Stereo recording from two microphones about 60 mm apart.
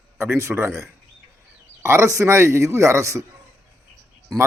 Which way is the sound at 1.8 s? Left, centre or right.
Right.